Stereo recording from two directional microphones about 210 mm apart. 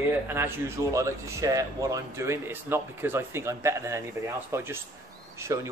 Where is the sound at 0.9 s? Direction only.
15° right (ahead or behind).